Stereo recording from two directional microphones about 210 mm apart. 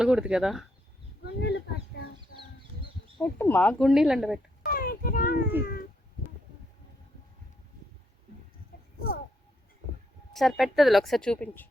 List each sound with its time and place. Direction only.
0.0 s a woman's voice: 5° right (ahead or behind)
1.2 s speech: 50° left (ahead or behind)
2.1 s chicken: 25° right (ahead or behind)
3.2 s a woman's voice: 10° left (ahead or behind)
4.6 s a sound: 45° left (ahead or behind)
10.3 s a woman's voice: centre (ahead or behind)